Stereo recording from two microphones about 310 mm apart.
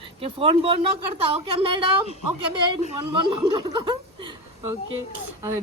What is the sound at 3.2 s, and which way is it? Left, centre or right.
Speech, centre.